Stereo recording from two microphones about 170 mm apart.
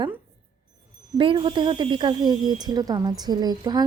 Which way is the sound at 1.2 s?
30° right (ahead or behind).